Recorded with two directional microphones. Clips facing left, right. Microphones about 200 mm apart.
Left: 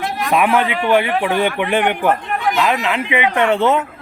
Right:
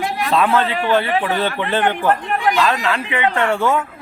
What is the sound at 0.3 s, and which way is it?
Speech, 15° left (ahead or behind).